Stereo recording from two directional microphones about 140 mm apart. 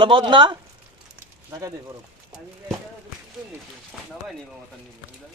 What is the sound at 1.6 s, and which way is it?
Speech, 25° right (ahead or behind).